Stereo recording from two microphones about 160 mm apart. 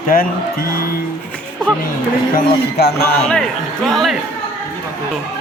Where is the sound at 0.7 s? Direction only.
65° left (ahead or behind).